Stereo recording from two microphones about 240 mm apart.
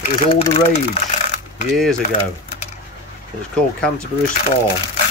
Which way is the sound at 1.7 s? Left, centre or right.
Centre.